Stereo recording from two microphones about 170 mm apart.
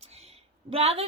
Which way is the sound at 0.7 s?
35° right (ahead or behind).